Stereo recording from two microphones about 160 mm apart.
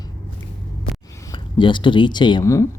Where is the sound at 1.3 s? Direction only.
30° left (ahead or behind).